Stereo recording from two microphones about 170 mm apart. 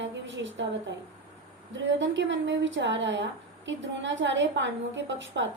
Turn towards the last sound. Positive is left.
turn(degrees=-90)